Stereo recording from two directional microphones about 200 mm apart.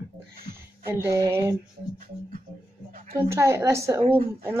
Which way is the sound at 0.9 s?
15° right (ahead or behind).